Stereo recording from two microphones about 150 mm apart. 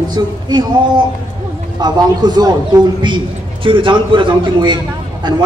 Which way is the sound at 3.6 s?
35° right (ahead or behind).